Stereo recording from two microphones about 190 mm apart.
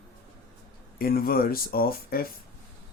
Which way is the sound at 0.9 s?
50° left (ahead or behind).